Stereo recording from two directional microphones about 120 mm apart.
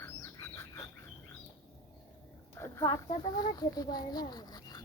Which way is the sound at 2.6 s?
25° left (ahead or behind).